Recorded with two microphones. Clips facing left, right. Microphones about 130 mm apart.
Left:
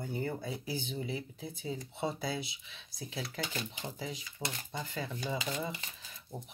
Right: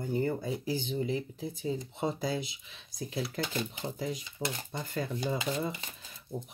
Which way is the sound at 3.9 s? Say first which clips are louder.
Right 6 dB; 50° right (ahead or behind).